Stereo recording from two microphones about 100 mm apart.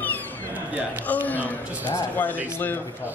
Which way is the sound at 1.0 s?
15° left (ahead or behind).